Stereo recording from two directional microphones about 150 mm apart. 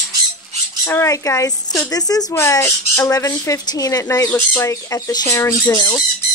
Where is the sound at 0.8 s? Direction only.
20° left (ahead or behind).